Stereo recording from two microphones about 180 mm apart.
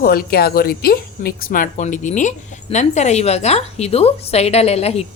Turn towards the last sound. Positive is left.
turn(degrees=35)  # may be behind; listen again after turning